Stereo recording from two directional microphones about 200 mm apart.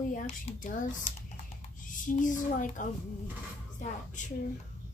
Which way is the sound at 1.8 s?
40° left (ahead or behind).